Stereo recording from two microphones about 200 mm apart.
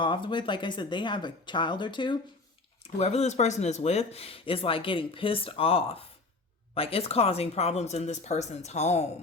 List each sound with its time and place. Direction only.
0.0 s speech: 25° left (ahead or behind)